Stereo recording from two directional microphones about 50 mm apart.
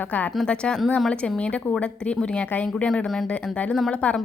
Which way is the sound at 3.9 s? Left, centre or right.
Left.